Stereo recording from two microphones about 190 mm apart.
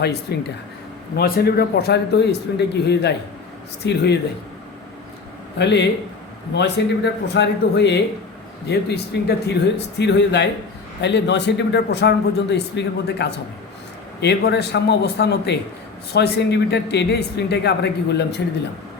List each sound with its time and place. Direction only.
0.0 s speech: 60° left (ahead or behind)
5.5 s speech: 65° left (ahead or behind)